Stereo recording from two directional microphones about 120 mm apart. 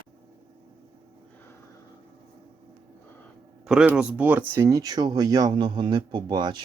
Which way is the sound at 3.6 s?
5° right (ahead or behind).